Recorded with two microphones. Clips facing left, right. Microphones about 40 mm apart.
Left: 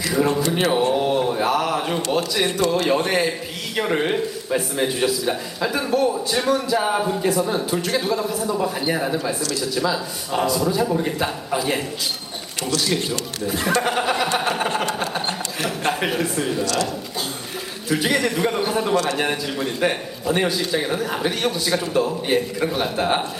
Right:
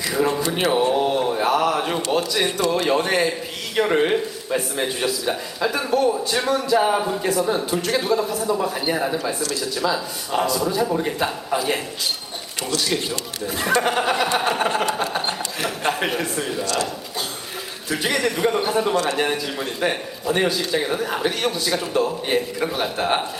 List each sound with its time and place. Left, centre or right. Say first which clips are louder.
0.1 s speech: left 1 dB; centre
0.9 s a sound: even; centre
2.1 s a man's voice: even; centre
12.9 s a man's voice: left 1 dB; centre
14.3 s a sound: right 1 dB; centre
15.9 s a man's voice: left 1 dB; centre
16.6 s speech: left 1 dB; right
17.8 s a man's voice: left 2 dB; centre